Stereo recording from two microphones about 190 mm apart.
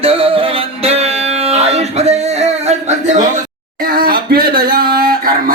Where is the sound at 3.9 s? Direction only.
50° right (ahead or behind).